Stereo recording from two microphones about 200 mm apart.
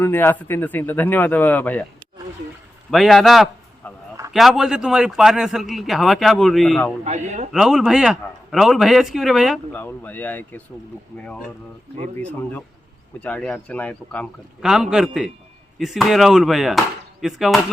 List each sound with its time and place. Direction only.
0.0 s a man's voice: 10° left (ahead or behind)
2.9 s a man's voice: centre (ahead or behind)
7.0 s speech: 35° right (ahead or behind)
7.5 s a man's voice: centre (ahead or behind)
9.7 s a man's voice: 10° left (ahead or behind)